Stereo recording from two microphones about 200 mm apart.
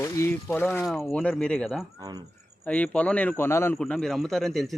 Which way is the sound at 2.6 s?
5° left (ahead or behind).